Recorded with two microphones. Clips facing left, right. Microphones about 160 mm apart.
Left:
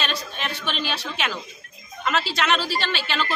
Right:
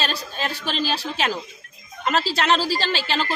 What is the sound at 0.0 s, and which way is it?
A man's voice, 35° right (ahead or behind).